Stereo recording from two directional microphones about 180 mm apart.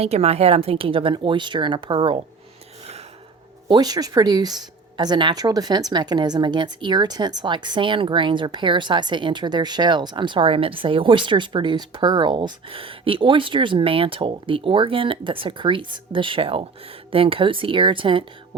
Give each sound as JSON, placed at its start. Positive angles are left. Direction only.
{"t": 0.0, "sound": "speech", "side_deg": -35}
{"t": 3.7, "sound": "speech", "side_deg": -20}